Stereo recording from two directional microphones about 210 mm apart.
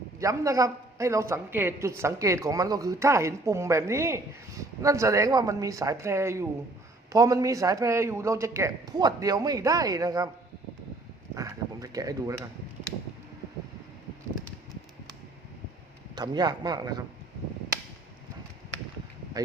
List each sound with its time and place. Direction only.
0.2 s speech: 15° right (ahead or behind)
11.3 s speech: 15° right (ahead or behind)
16.1 s speech: 20° right (ahead or behind)